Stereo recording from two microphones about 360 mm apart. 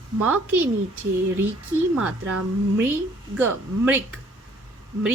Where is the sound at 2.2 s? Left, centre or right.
Right.